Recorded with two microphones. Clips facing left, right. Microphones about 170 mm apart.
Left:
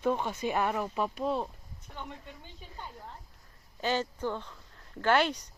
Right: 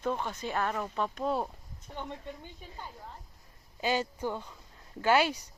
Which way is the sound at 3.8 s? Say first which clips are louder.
Even; 10° right (ahead or behind).